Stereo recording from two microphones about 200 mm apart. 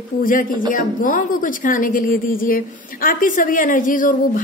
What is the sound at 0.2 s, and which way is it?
A woman's voice, 45° left (ahead or behind).